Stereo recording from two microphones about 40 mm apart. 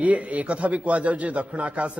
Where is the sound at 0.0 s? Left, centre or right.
Right.